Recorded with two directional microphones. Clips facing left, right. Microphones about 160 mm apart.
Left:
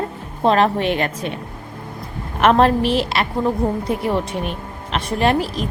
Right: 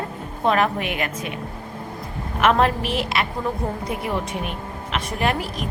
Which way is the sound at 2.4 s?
35° left (ahead or behind).